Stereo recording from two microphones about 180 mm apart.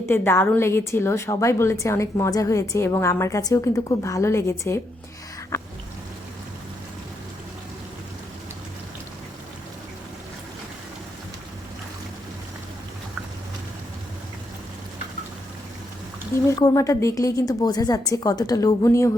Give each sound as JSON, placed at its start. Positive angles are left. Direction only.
{"t": 0.0, "sound": "a woman's voice", "side_deg": 10}
{"t": 5.5, "sound": "a sound", "side_deg": 15}
{"t": 16.5, "sound": "a woman's voice", "side_deg": 20}